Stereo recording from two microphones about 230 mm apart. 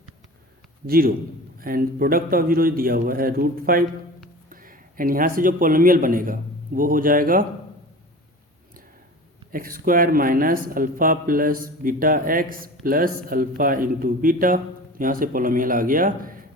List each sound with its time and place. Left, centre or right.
0.9 s speech: right
9.5 s speech: right